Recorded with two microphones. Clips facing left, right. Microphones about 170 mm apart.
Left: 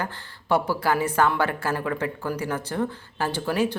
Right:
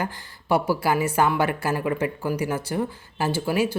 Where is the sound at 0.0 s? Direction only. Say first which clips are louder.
Right 2 dB; 10° right (ahead or behind).